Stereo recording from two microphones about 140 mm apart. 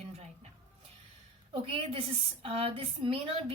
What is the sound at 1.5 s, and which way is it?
A woman's voice, 40° right (ahead or behind).